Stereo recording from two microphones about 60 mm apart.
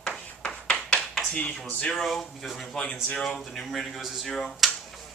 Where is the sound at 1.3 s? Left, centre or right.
Left.